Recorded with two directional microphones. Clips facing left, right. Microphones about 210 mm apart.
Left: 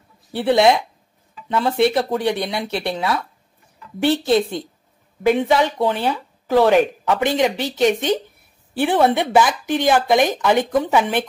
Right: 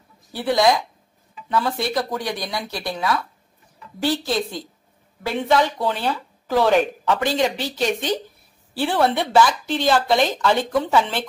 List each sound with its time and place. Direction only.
0.3 s speech: 25° left (ahead or behind)